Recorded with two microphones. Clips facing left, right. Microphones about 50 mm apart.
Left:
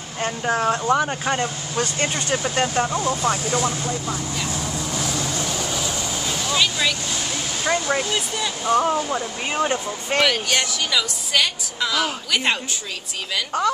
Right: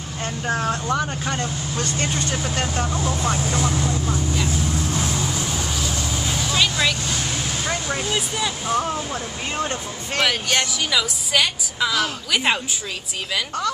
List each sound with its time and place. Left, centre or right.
0.5 s speech: left
4.9 s vehicle: centre
5.6 s vehicle: centre
7.6 s speech: centre
8.0 s a woman's voice: centre
8.7 s speech: centre
10.2 s a woman's voice: centre